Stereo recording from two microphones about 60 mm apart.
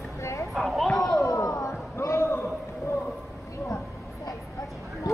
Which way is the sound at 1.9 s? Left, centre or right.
Left.